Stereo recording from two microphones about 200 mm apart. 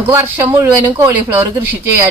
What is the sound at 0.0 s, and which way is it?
Speech, 10° right (ahead or behind).